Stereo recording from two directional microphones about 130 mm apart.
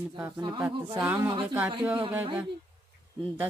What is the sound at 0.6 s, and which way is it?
Speech, 20° right (ahead or behind).